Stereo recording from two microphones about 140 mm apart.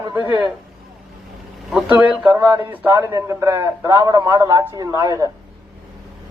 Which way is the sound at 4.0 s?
30° right (ahead or behind).